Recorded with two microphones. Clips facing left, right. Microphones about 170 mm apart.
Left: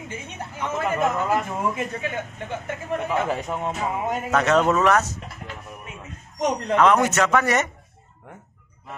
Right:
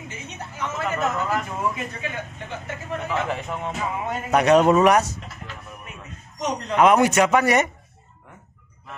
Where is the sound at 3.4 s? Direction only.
15° left (ahead or behind).